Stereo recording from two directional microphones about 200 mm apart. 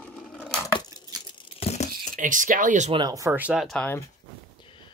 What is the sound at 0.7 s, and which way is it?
Tearing, 20° left (ahead or behind).